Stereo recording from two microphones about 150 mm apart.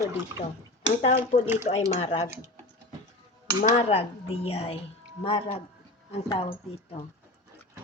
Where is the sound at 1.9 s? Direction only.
45° left (ahead or behind).